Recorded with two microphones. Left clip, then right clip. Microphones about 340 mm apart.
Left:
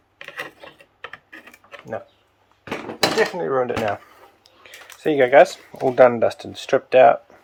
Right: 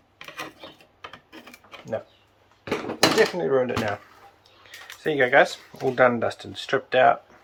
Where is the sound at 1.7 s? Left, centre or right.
Centre.